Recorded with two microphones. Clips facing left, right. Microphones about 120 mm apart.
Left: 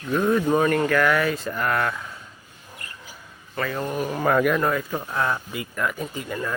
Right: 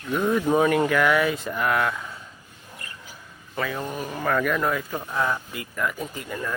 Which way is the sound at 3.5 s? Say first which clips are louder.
Left 2 dB; 5° right (ahead or behind).